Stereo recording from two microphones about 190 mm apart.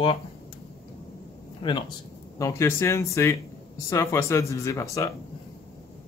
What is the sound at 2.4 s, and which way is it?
Speech, 15° left (ahead or behind).